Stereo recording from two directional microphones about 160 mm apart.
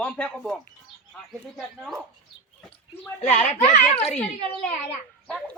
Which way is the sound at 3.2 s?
45° left (ahead or behind).